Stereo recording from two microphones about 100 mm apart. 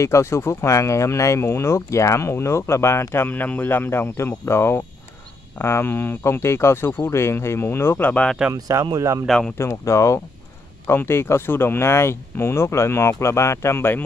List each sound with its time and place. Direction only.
0.0 s speech: 30° left (ahead or behind); by 8.4 s 10° left (ahead or behind)
8.5 s speech: 35° right (ahead or behind)
9.2 s speech: centre (ahead or behind)
9.6 s speech: 30° left (ahead or behind)